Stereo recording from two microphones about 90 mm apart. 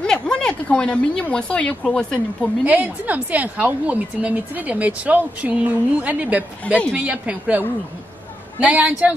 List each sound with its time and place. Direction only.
0.0 s speech: 10° left (ahead or behind)
2.6 s a woman's voice: 15° right (ahead or behind)
6.7 s a woman's voice: 15° left (ahead or behind)
7.0 s a woman's voice: 15° right (ahead or behind)